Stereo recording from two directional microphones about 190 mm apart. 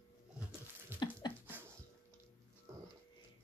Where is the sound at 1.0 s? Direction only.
25° left (ahead or behind).